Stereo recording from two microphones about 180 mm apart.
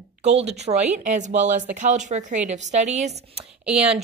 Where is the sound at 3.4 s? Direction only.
5° right (ahead or behind).